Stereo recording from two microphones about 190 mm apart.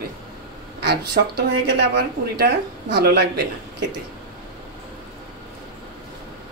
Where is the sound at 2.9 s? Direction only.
60° right (ahead or behind).